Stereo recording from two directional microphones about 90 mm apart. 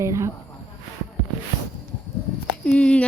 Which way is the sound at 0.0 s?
35° right (ahead or behind).